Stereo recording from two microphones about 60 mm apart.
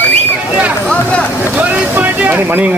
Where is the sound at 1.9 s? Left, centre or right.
Right.